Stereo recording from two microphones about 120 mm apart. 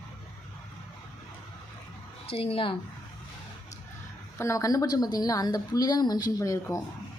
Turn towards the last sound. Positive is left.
turn(degrees=25)  # may be behind; listen again after turning